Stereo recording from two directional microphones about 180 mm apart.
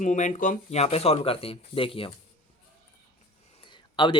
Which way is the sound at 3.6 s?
25° left (ahead or behind).